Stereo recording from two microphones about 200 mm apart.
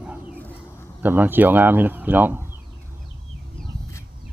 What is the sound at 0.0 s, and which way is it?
Bird, 5° right (ahead or behind).